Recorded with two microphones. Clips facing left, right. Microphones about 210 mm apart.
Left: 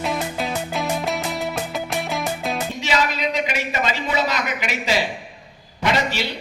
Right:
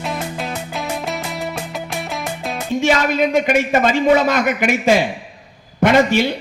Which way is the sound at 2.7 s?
50° right (ahead or behind).